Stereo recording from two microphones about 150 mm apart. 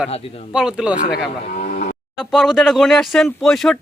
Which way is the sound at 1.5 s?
65° left (ahead or behind).